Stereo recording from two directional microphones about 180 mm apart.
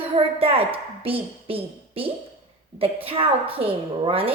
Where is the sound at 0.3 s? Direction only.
30° right (ahead or behind).